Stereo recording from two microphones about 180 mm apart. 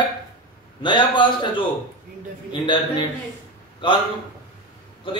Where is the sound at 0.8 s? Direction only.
25° left (ahead or behind).